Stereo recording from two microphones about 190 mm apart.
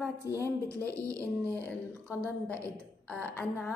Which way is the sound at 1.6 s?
10° left (ahead or behind).